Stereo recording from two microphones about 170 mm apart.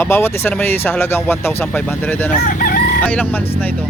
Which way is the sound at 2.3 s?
50° left (ahead or behind).